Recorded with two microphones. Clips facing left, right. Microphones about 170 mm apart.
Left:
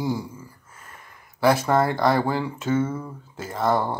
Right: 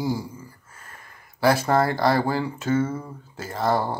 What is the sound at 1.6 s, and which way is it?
Speech, 35° right (ahead or behind).